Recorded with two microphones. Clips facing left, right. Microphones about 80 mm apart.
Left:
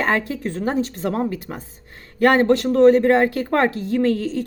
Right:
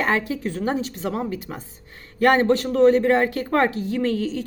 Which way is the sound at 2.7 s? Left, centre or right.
Left.